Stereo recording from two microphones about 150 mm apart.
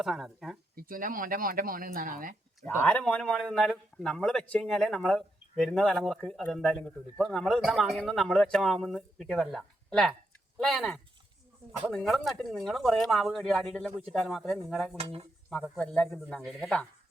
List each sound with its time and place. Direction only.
0.0 s speech: centre (ahead or behind)
0.8 s speech: 70° right (ahead or behind)
2.6 s speech: 10° left (ahead or behind)
14.9 s speech: 40° right (ahead or behind)
15.8 s speech: 5° left (ahead or behind)